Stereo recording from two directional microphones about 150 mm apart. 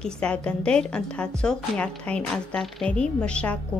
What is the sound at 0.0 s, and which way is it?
A woman's voice, 5° left (ahead or behind).